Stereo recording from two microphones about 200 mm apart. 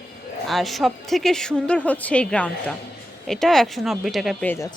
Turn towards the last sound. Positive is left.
turn(degrees=15)  # may be behind; listen again after turning